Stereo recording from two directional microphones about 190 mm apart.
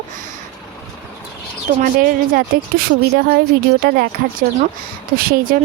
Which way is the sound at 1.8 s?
50° right (ahead or behind).